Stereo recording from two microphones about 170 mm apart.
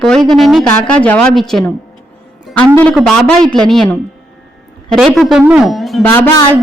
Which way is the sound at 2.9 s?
Centre (ahead or behind).